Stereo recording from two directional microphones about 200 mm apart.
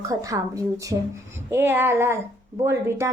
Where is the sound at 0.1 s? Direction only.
15° right (ahead or behind).